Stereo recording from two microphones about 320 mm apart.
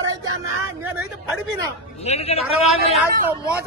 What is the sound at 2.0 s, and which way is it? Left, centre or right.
Speech, centre.